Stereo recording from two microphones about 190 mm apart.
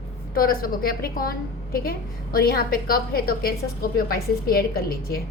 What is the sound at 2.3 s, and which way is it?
A woman's voice, 55° left (ahead or behind).